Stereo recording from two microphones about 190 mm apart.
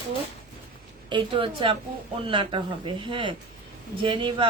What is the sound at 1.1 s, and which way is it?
Speech, 25° right (ahead or behind).